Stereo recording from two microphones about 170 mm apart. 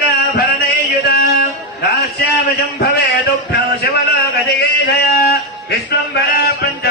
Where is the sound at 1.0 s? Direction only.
60° left (ahead or behind).